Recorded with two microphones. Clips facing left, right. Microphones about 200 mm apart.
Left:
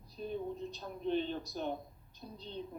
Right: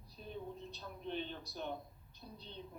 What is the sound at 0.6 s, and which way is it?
A man's voice, 45° left (ahead or behind).